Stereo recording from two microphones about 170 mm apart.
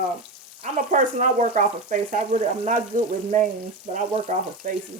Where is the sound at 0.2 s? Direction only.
45° right (ahead or behind).